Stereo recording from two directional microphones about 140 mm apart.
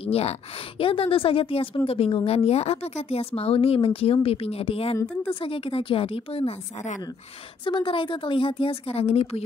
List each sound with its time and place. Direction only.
0.0 s a woman's voice: 45° left (ahead or behind)